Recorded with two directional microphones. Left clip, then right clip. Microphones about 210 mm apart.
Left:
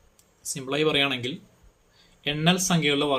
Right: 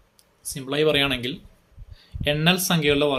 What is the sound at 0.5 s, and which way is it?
Speech, 10° right (ahead or behind).